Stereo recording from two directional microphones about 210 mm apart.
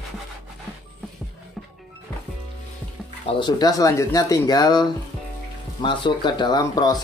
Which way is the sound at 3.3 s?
20° left (ahead or behind).